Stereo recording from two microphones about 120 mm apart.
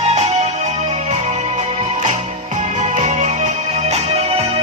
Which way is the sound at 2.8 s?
70° right (ahead or behind).